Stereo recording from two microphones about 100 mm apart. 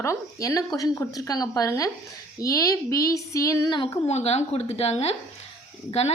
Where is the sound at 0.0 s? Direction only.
30° left (ahead or behind).